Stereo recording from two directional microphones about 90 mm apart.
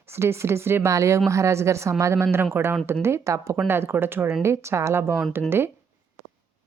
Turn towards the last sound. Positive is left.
turn(degrees=-25)  # may be behind; listen again after turning